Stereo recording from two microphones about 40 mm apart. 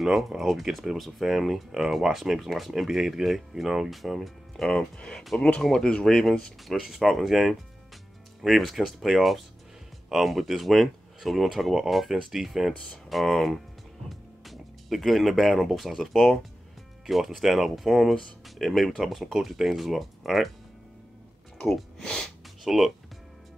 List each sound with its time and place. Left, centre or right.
0.4 s speech: centre
1.7 s speech: centre
4.6 s speech: left
7.0 s speech: centre
12.7 s speech: left
13.1 s speech: centre
22.6 s speech: centre